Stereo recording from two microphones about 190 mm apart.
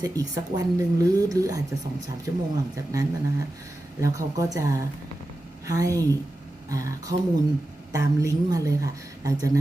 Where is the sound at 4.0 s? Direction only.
15° right (ahead or behind).